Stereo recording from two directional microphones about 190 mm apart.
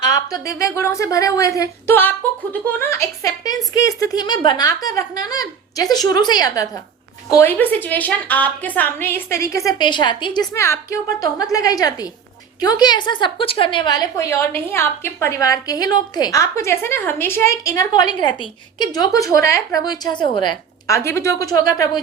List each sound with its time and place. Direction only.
0.0 s a woman's voice: 20° left (ahead or behind)
10.5 s a woman's voice: 15° left (ahead or behind)